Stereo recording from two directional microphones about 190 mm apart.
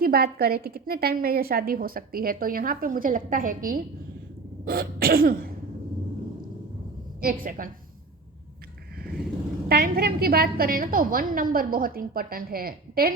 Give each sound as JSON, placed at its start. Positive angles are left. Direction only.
{"t": 0.0, "sound": "a woman's voice", "side_deg": -55}
{"t": 4.6, "sound": "cough", "side_deg": -50}
{"t": 7.2, "sound": "a woman's voice", "side_deg": -50}
{"t": 9.0, "sound": "vehicle", "side_deg": -55}
{"t": 9.6, "sound": "a woman's voice", "side_deg": -55}